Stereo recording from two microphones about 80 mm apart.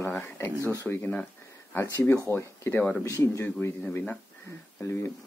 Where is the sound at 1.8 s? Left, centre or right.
Left.